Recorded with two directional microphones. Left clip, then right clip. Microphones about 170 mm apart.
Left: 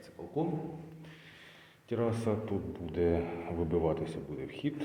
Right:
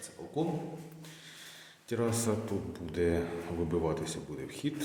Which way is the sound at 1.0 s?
15° right (ahead or behind).